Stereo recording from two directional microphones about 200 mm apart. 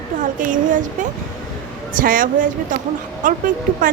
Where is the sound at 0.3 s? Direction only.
40° right (ahead or behind).